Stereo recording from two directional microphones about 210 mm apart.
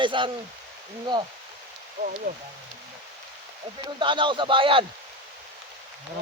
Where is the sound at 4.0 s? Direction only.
25° right (ahead or behind).